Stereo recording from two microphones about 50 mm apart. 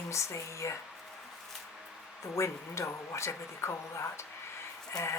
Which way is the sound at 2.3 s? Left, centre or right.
Left.